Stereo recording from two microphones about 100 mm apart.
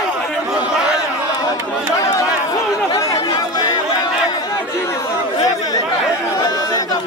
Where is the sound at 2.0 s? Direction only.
30° left (ahead or behind).